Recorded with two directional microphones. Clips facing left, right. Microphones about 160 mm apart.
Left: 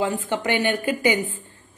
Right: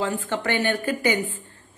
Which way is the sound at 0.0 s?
15° left (ahead or behind).